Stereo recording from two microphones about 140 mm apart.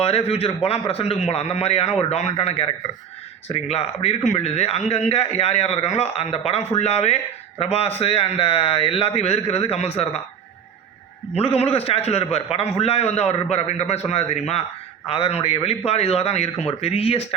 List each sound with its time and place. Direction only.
0.0 s a man's voice: 45° left (ahead or behind)
11.3 s a man's voice: 45° left (ahead or behind)